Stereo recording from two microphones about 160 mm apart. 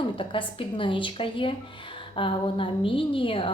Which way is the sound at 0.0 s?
30° left (ahead or behind).